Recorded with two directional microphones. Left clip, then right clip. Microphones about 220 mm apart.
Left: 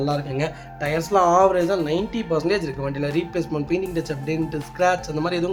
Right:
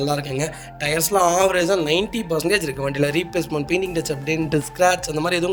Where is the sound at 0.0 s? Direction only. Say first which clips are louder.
Right 1 dB; 50° right (ahead or behind).